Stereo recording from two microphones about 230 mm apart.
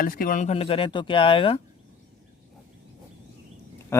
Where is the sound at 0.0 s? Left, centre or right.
Left.